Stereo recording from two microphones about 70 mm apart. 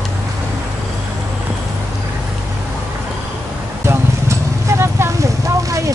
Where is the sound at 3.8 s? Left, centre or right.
Right.